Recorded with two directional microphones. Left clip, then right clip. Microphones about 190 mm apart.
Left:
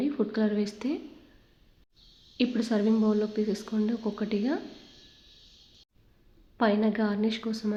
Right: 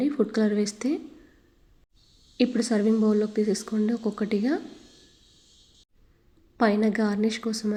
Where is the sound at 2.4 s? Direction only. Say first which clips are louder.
Right 3 dB; 15° right (ahead or behind).